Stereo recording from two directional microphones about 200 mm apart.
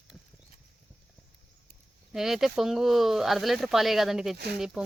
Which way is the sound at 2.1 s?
Centre (ahead or behind).